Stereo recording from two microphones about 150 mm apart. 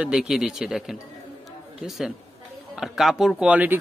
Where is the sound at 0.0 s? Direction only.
5° right (ahead or behind).